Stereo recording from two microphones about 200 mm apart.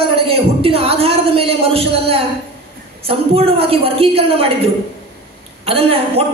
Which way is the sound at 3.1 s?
30° right (ahead or behind).